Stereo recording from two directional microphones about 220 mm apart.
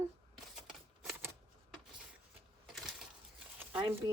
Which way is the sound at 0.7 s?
Centre (ahead or behind).